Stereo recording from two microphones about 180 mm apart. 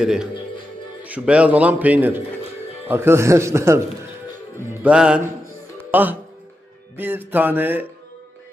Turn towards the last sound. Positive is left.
turn(degrees=-10)  # may be behind; listen again after turning